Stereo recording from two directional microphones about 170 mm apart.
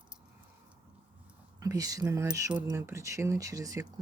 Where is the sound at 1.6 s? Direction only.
20° right (ahead or behind).